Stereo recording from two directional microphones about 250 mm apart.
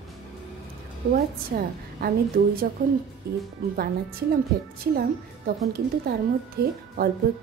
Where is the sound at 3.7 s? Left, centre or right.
Right.